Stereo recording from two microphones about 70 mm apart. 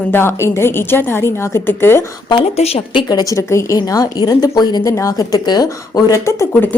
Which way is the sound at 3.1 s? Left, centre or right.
Left.